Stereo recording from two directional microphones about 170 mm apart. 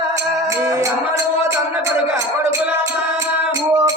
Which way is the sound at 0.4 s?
20° right (ahead or behind).